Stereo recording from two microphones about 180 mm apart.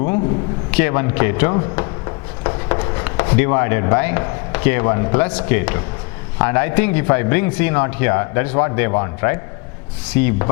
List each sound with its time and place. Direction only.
0.7 s a man's voice: 15° left (ahead or behind)